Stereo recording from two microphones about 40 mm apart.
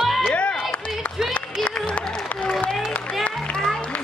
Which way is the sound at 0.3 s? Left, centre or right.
Left.